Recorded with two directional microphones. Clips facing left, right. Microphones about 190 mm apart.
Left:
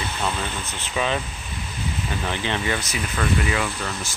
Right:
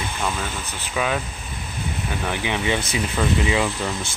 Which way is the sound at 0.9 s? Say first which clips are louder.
Right 1 dB; 5° right (ahead or behind).